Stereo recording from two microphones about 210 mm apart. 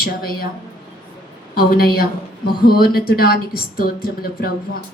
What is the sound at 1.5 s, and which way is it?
A woman's voice, 45° left (ahead or behind).